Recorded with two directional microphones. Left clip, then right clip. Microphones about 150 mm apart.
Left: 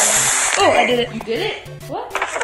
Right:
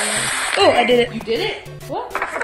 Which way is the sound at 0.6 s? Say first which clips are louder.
Right 2 dB; 15° right (ahead or behind).